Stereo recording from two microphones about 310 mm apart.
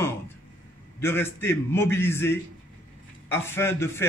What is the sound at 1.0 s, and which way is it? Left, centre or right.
A man's voice, centre.